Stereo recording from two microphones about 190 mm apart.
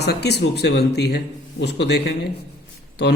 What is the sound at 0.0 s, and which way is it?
Speech, 60° left (ahead or behind).